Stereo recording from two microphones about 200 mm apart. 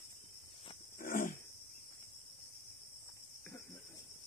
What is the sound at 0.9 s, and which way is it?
Wild animals, 45° left (ahead or behind).